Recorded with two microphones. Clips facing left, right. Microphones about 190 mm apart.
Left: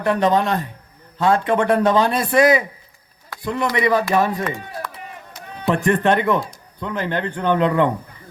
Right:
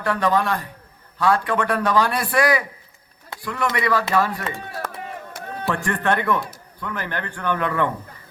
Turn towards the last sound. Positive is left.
turn(degrees=20)  # may be behind; listen again after turning